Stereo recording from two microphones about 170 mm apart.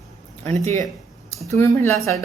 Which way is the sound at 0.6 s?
20° left (ahead or behind).